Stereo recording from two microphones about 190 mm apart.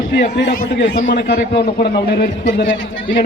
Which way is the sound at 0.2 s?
65° left (ahead or behind).